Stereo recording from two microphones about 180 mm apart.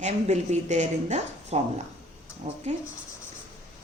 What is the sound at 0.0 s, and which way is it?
A woman's voice, 40° right (ahead or behind).